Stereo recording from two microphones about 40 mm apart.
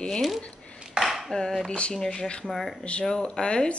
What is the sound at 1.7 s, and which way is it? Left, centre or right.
Speech, left.